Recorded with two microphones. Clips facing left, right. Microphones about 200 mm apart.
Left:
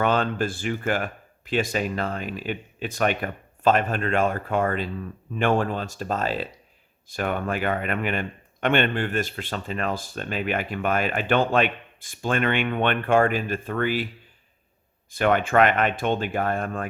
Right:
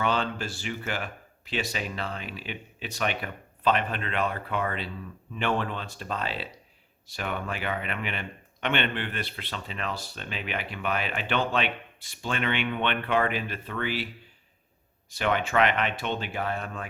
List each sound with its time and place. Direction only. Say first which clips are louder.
0.0 s speech: left 5 dB; 50° left (ahead or behind)
15.1 s speech: left 6 dB; 50° left (ahead or behind)